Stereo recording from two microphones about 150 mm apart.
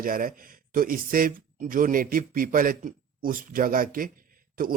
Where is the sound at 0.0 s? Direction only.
70° right (ahead or behind).